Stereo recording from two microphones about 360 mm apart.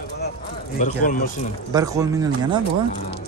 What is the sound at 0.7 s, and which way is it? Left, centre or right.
Speech, left.